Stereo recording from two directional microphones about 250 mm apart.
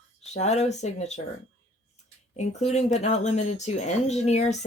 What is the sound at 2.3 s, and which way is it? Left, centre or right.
Speech, left.